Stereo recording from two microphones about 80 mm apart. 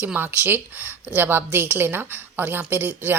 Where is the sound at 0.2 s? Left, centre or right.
Right.